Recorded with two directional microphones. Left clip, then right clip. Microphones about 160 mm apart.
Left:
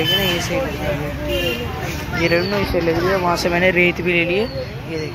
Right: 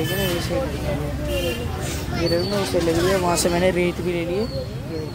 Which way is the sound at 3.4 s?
25° right (ahead or behind).